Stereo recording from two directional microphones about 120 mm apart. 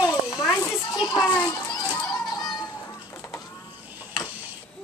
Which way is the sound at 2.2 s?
35° left (ahead or behind).